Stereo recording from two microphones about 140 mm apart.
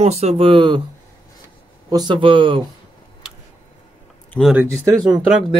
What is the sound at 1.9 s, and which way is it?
Speech, 30° right (ahead or behind).